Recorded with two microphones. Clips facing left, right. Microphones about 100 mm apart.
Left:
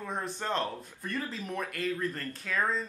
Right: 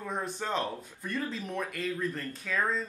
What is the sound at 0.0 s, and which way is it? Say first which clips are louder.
Speech: right 1 dB; centre (ahead or behind).